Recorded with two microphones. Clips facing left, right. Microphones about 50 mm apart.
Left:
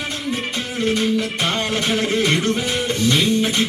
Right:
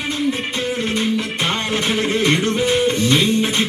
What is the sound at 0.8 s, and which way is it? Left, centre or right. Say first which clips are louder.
Music: left 5 dB; right.